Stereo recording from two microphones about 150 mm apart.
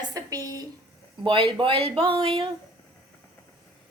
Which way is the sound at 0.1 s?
25° right (ahead or behind).